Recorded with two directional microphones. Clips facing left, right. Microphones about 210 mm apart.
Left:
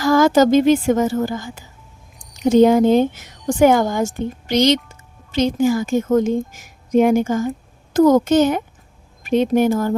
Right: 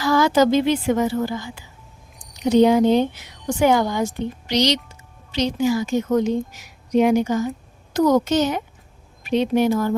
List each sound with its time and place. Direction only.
0.0 s a woman's voice: 45° left (ahead or behind)